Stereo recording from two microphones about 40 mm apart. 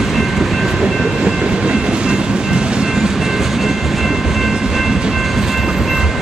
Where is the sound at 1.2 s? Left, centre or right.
Right.